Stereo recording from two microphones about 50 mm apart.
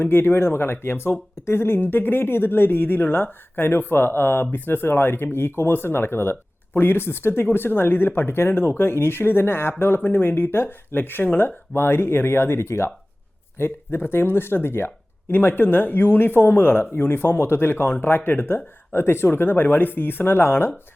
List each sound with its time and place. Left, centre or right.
0.0 s speech: left
13.6 s speech: left